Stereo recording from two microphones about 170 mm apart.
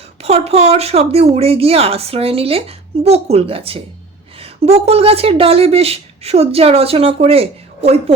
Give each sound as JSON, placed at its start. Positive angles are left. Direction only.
{"t": 0.2, "sound": "speech", "side_deg": -40}